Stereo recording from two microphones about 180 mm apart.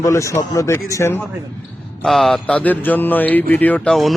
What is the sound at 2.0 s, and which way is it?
Mantra, centre (ahead or behind).